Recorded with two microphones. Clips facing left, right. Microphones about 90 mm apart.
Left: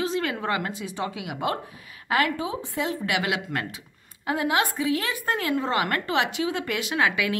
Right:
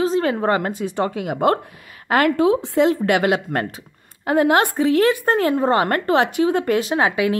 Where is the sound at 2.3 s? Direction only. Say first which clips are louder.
Right 13 dB; 70° right (ahead or behind).